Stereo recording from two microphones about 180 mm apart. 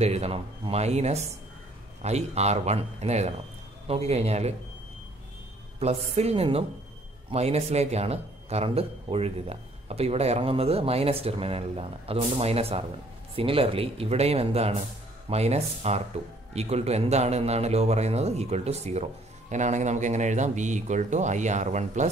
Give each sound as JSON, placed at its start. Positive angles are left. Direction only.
{"t": 0.0, "sound": "speech", "side_deg": -35}
{"t": 5.8, "sound": "speech", "side_deg": -35}